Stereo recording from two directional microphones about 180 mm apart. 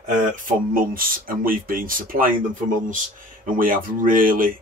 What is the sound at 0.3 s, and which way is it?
Speech, 50° right (ahead or behind).